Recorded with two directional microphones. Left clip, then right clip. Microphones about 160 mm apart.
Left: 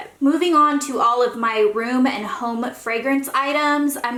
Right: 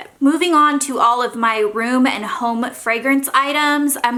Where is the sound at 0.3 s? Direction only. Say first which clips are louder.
Right 2 dB; 30° right (ahead or behind).